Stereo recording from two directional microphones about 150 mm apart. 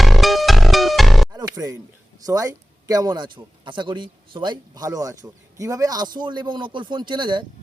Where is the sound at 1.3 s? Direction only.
25° right (ahead or behind).